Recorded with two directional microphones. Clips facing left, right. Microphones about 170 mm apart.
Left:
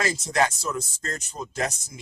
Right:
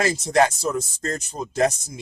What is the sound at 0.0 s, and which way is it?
Speech, 35° right (ahead or behind).